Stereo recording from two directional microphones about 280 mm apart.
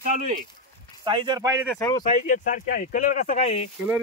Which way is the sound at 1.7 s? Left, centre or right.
Centre.